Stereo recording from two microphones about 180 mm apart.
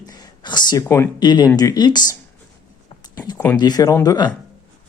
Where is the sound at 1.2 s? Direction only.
25° left (ahead or behind).